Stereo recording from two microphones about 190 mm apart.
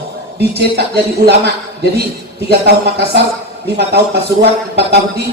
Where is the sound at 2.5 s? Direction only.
60° right (ahead or behind).